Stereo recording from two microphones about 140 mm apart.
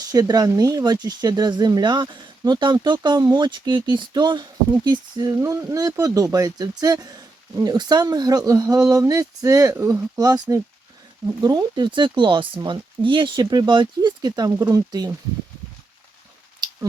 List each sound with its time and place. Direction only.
0.1 s speech: 25° right (ahead or behind)